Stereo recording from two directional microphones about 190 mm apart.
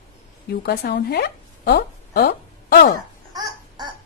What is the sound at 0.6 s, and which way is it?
Speech, 55° left (ahead or behind).